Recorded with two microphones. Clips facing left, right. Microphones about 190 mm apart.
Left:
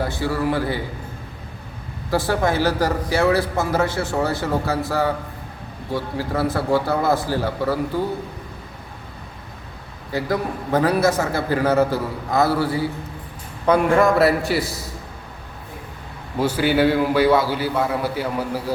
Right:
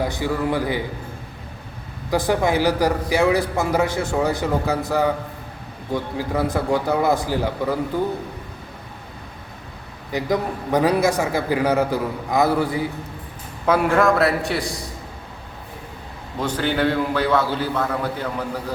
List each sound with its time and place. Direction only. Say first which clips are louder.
0.0 s a man's voice: even; 15° right (ahead or behind)
2.0 s a man's voice: right 1 dB; 15° right (ahead or behind)
10.1 s a man's voice: right 1 dB; 15° right (ahead or behind)
13.7 s a man's voice: left 1 dB; centre (ahead or behind)
16.4 s a man's voice: left 4 dB; 10° left (ahead or behind)